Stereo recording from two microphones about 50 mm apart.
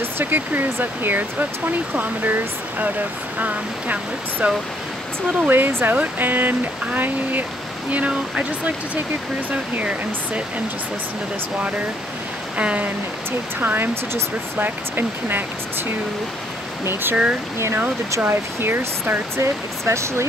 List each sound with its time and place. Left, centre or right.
0.0 s speech: right
5.5 s speech: right
7.9 s speech: right
9.8 s speech: right
12.5 s speech: right
13.6 s speech: right
16.8 s speech: right
18.2 s speech: right
19.3 s speech: right